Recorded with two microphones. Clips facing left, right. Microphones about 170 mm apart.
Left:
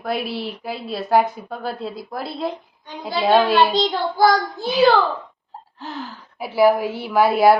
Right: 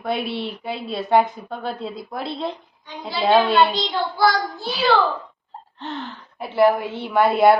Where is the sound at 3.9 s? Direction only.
45° left (ahead or behind).